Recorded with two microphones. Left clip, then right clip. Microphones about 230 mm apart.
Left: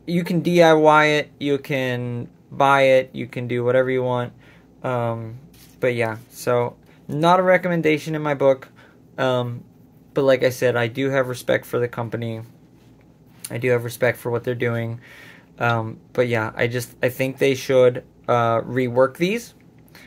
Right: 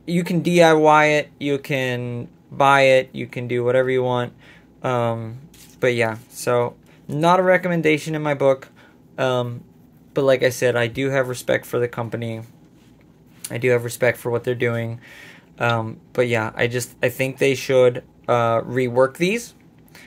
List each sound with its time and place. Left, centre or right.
0.0 s speech: centre